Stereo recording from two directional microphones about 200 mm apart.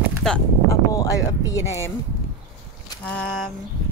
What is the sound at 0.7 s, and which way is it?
Speech, 15° left (ahead or behind).